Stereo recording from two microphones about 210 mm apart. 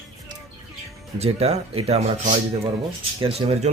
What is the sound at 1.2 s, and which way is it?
Speech, 30° right (ahead or behind).